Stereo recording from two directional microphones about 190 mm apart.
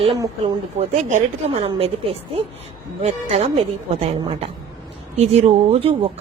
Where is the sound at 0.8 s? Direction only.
30° right (ahead or behind).